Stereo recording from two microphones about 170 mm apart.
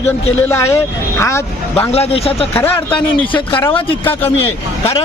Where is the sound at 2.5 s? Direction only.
10° left (ahead or behind).